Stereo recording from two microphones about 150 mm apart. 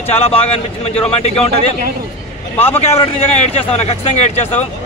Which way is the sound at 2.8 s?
40° left (ahead or behind).